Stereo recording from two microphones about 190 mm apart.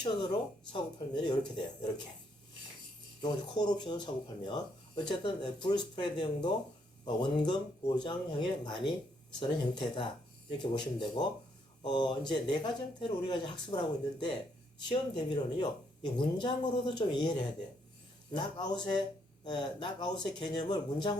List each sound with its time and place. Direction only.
0.0 s speech: 25° left (ahead or behind)
3.2 s speech: 20° left (ahead or behind)